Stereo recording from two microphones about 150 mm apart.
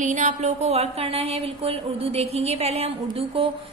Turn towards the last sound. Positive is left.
turn(degrees=-40)  # may be behind; listen again after turning